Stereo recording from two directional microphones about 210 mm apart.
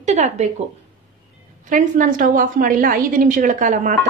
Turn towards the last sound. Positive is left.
turn(degrees=-40)  # may be behind; listen again after turning